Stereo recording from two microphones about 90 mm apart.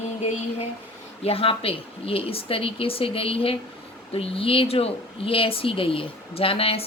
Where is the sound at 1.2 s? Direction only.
90° left.